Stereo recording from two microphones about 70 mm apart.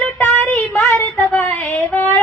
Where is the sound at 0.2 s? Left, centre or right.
Left.